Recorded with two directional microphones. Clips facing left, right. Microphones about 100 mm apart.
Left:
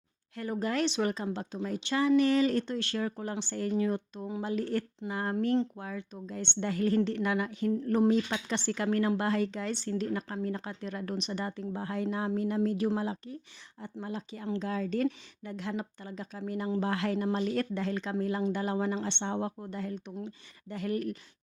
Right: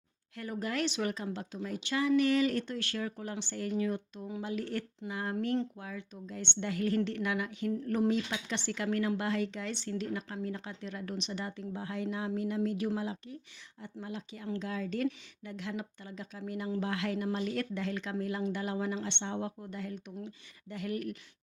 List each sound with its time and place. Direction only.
0.3 s a woman's voice: 30° left (ahead or behind)